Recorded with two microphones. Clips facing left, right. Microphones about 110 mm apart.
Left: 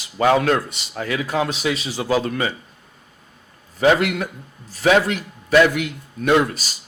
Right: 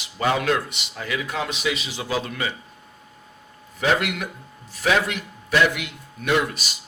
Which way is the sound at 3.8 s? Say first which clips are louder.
Left 6 dB; 40° left (ahead or behind).